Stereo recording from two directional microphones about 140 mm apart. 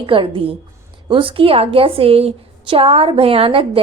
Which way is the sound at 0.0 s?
40° right (ahead or behind).